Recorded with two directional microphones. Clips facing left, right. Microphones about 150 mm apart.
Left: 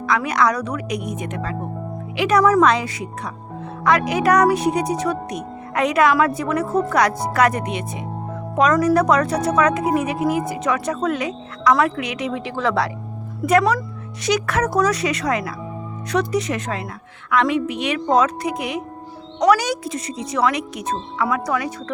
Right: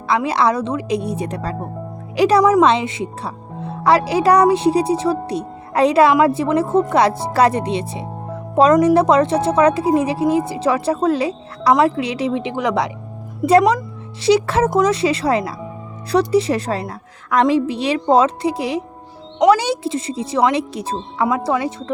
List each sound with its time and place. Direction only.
0.1 s a woman's voice: 30° right (ahead or behind)
2.4 s a woman's voice: 20° right (ahead or behind)
13.4 s a woman's voice: 30° right (ahead or behind)